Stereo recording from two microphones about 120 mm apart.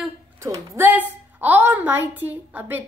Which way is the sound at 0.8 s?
15° right (ahead or behind).